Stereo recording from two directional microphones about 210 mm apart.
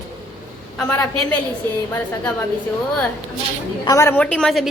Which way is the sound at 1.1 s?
90° left.